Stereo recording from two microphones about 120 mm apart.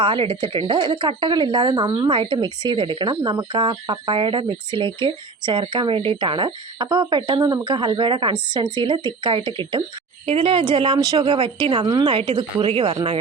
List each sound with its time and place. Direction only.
0.0 s a woman's voice: 45° right (ahead or behind)
11.3 s a woman's voice: 45° right (ahead or behind)
12.1 s a woman's voice: 50° right (ahead or behind)